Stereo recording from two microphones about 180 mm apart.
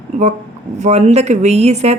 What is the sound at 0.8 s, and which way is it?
A woman's voice, 40° right (ahead or behind).